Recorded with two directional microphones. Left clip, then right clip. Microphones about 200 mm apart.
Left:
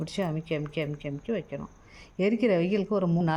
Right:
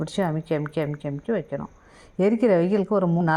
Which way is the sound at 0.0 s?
20° right (ahead or behind).